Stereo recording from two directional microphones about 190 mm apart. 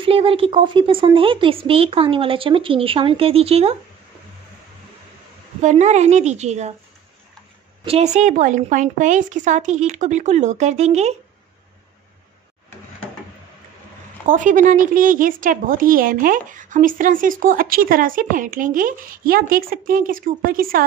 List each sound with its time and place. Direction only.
0.0 s speech: 30° right (ahead or behind)
5.6 s a woman's voice: 40° right (ahead or behind)
7.8 s a woman's voice: 35° right (ahead or behind)
14.2 s a woman's voice: 45° right (ahead or behind)